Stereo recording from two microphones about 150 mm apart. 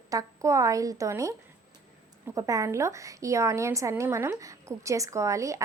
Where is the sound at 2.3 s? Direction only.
20° right (ahead or behind).